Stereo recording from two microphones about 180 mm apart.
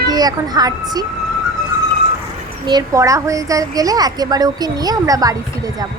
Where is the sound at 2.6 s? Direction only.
20° right (ahead or behind).